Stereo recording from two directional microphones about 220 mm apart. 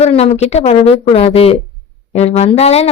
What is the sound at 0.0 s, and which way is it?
A woman's voice, 30° left (ahead or behind).